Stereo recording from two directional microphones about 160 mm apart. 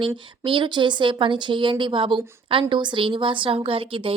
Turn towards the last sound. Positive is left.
turn(degrees=-35)  # may be behind; listen again after turning